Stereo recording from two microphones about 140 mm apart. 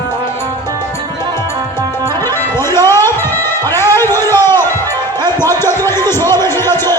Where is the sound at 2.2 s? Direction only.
20° left (ahead or behind).